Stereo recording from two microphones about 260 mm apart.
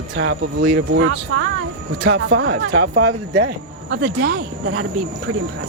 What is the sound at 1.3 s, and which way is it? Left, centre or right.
Speech, right.